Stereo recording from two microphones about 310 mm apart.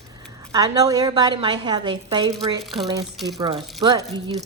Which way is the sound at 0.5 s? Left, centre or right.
Centre.